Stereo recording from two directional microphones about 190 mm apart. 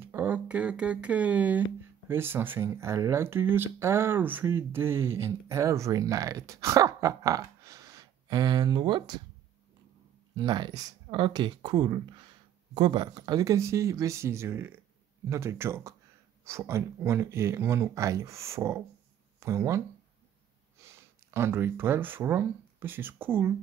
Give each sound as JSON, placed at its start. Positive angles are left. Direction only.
{"t": 0.0, "sound": "speech", "side_deg": -10}
{"t": 10.3, "sound": "speech", "side_deg": -25}
{"t": 21.3, "sound": "speech", "side_deg": -10}